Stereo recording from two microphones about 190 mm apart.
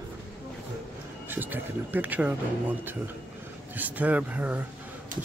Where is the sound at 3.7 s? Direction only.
10° right (ahead or behind).